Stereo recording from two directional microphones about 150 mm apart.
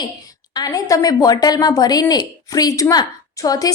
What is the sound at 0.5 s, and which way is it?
A woman's voice, 25° left (ahead or behind).